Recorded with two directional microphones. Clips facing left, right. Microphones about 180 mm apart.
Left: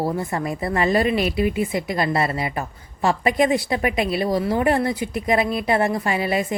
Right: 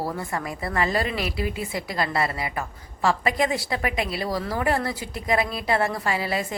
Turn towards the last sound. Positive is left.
turn(degrees=20)  # may be behind; listen again after turning